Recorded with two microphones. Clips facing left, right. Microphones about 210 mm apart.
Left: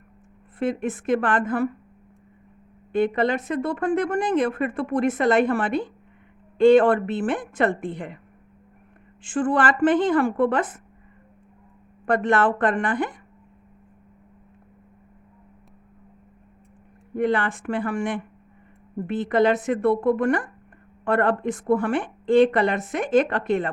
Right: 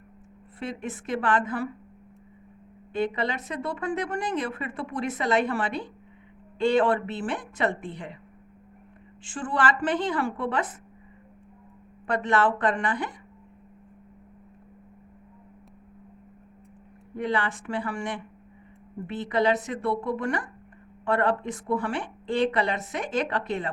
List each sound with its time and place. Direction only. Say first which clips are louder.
0.6 s speech: left 9 dB; 50° left (ahead or behind)
2.9 s speech: left 6 dB; 50° left (ahead or behind)
9.2 s speech: left 6 dB; 50° left (ahead or behind)
12.0 s speech: left 4 dB; 50° left (ahead or behind)
17.2 s speech: left 5 dB; 50° left (ahead or behind)